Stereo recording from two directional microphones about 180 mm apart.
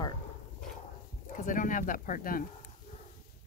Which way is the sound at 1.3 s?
45° left (ahead or behind).